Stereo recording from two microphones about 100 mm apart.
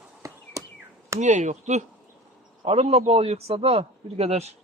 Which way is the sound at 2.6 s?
90° right.